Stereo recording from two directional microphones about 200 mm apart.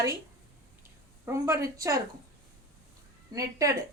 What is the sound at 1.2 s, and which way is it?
Speech, 15° right (ahead or behind).